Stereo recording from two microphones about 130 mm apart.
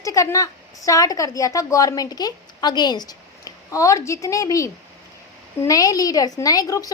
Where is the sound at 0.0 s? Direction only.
25° left (ahead or behind).